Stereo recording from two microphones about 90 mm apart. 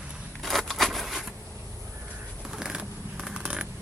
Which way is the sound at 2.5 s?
5° right (ahead or behind).